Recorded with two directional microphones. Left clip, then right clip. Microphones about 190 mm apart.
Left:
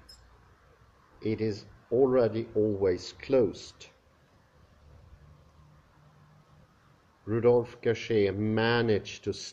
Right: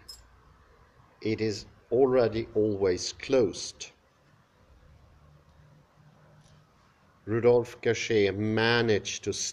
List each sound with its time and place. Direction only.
1.2 s speech: 5° right (ahead or behind)
7.2 s speech: 5° right (ahead or behind)